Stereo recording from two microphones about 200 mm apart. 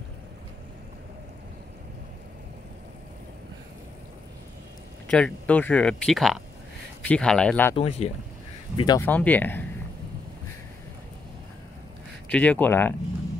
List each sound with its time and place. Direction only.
5.1 s speech: 5° left (ahead or behind)
7.7 s speech: 30° left (ahead or behind)
8.7 s speech: 20° left (ahead or behind)
9.0 s speech: 10° left (ahead or behind)
12.3 s speech: 5° left (ahead or behind)